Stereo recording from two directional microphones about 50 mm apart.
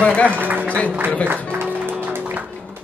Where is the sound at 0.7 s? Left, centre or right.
Left.